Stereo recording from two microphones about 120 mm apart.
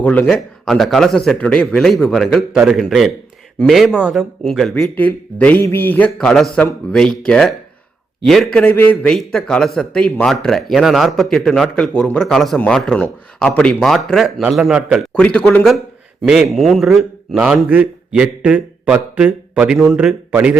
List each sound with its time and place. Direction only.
0.0 s a man's voice: 15° left (ahead or behind)
4.9 s a man's voice: 15° left (ahead or behind); by 15.0 s 5° right (ahead or behind)
15.1 s a man's voice: 10° left (ahead or behind); by 20.6 s 15° right (ahead or behind)